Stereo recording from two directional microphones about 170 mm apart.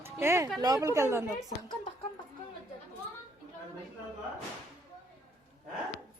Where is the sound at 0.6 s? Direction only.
20° right (ahead or behind).